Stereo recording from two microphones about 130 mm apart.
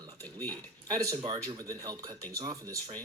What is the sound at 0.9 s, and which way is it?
Speech, 25° right (ahead or behind).